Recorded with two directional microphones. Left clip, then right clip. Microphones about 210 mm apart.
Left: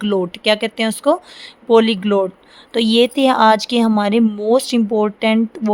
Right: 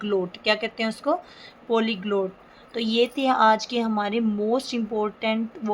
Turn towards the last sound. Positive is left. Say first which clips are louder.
# left 9 dB
turn(degrees=55)  # may be behind; listen again after turning